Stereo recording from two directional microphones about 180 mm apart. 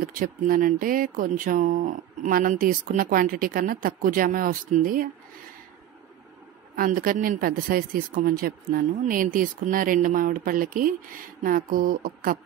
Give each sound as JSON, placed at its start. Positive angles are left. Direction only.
{"t": 0.0, "sound": "speech", "side_deg": -50}
{"t": 6.7, "sound": "speech", "side_deg": -50}